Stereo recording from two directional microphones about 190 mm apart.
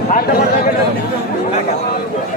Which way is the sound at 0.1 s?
50° left (ahead or behind).